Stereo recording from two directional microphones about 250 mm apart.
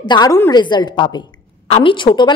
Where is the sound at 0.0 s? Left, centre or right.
Centre.